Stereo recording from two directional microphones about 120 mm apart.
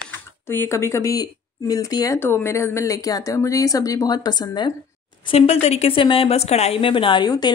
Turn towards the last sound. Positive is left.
turn(degrees=35)  # may be behind; listen again after turning